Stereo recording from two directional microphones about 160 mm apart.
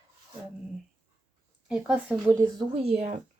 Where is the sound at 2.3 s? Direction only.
20° right (ahead or behind).